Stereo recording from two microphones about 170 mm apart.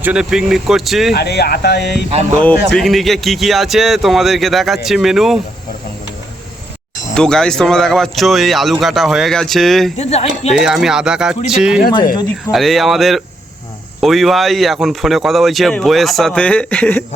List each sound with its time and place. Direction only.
0.0 s speech: 5° right (ahead or behind)
1.1 s speech: 70° left (ahead or behind)
2.6 s speech: centre (ahead or behind)
7.1 s speech: 5° left (ahead or behind)
10.0 s speech: 40° left (ahead or behind)
10.5 s speech: 5° right (ahead or behind)